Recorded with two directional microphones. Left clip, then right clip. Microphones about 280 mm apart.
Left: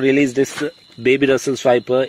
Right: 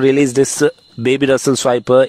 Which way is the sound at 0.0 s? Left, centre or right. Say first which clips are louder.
Right 3 dB; right.